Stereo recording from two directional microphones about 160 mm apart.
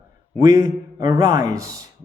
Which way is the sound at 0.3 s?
20° right (ahead or behind).